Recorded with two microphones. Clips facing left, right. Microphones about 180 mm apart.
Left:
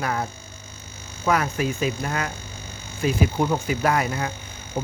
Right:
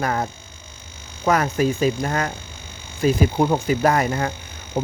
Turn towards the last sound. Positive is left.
turn(degrees=-45)  # may be behind; listen again after turning